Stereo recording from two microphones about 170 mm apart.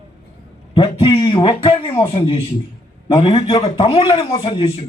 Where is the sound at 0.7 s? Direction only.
25° left (ahead or behind).